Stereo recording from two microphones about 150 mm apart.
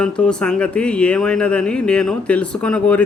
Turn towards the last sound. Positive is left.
turn(degrees=10)  # may be behind; listen again after turning